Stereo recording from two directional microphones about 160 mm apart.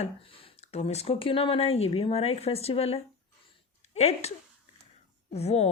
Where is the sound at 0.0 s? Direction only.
35° left (ahead or behind).